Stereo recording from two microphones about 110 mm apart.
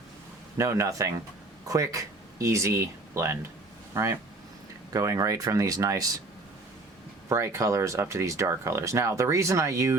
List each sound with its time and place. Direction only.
0.5 s speech: 25° right (ahead or behind)
7.3 s speech: 25° right (ahead or behind)